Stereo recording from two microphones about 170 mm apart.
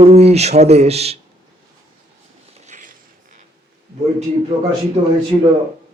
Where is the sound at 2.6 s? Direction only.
50° right (ahead or behind).